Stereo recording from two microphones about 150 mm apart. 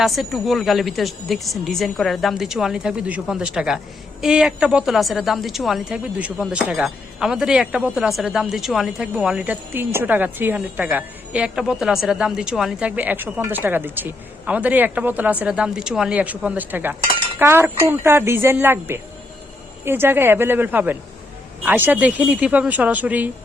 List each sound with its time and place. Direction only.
0.0 s a woman's voice: centre (ahead or behind)